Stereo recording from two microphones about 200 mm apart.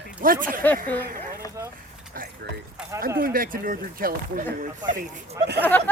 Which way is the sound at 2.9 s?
45° right (ahead or behind).